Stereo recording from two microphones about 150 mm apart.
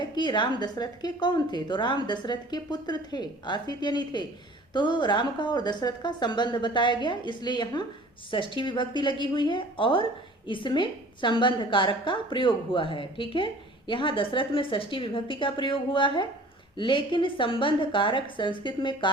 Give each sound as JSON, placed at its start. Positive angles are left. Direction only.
{"t": 0.0, "sound": "a woman's voice", "side_deg": 30}